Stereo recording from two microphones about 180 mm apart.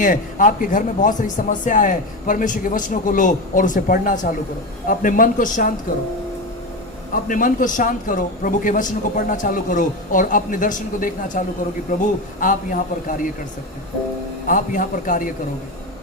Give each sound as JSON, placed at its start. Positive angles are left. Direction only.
{"t": 0.0, "sound": "speech", "side_deg": 45}
{"t": 7.1, "sound": "speech", "side_deg": 50}
{"t": 14.4, "sound": "speech", "side_deg": 50}